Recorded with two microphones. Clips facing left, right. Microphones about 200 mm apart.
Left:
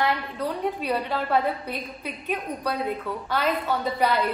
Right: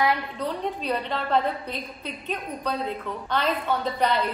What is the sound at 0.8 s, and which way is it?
A woman's voice, 10° left (ahead or behind).